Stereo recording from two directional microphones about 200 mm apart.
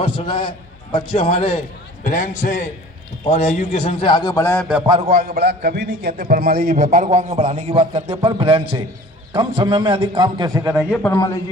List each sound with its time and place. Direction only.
0.0 s a man's voice: 25° left (ahead or behind)
5.0 s a man's voice: 40° right (ahead or behind); by 10.8 s 10° right (ahead or behind)
10.9 s a man's voice: 10° left (ahead or behind)